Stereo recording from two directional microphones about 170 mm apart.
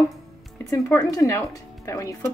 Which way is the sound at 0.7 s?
20° left (ahead or behind).